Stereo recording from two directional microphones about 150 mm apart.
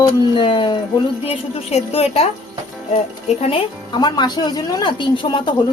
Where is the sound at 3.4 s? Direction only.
40° left (ahead or behind).